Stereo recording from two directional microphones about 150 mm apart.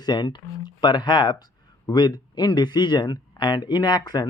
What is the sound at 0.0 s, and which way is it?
Speech, 30° left (ahead or behind).